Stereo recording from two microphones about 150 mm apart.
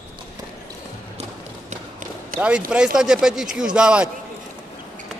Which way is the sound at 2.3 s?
70° right (ahead or behind).